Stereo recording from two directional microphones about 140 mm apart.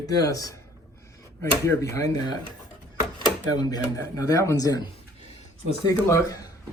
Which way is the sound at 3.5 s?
30° left (ahead or behind).